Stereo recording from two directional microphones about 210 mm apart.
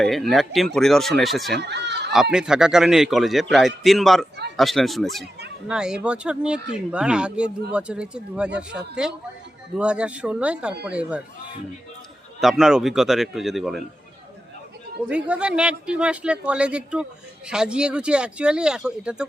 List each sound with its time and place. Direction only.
0.0 s speech: centre (ahead or behind)
1.5 s speech: 55° right (ahead or behind)
2.3 s speech: 5° right (ahead or behind)
12.4 s speech: centre (ahead or behind)
15.1 s speech: 5° right (ahead or behind)